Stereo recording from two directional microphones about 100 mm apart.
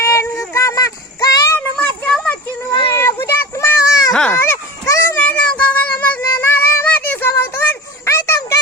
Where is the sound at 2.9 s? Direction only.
25° left (ahead or behind).